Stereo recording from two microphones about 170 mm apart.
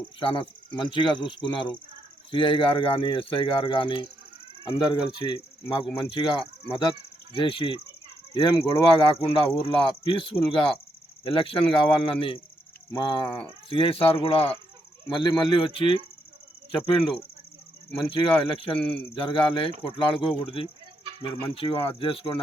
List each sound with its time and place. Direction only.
0.2 s speech: 30° left (ahead or behind)
5.1 s speech: 30° left (ahead or behind)